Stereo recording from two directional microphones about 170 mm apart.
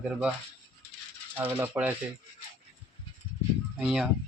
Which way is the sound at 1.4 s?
10° right (ahead or behind).